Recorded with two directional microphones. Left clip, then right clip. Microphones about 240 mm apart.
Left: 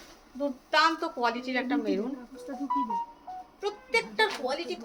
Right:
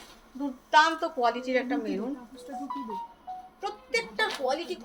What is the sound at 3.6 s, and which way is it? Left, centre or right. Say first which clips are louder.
Speech: left 2 dB; centre.